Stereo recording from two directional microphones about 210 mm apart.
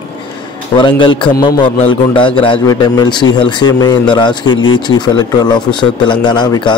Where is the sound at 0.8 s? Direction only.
25° left (ahead or behind).